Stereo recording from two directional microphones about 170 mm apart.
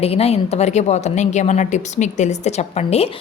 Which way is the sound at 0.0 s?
35° left (ahead or behind).